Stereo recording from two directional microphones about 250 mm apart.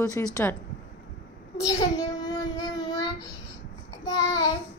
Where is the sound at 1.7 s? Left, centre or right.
Centre.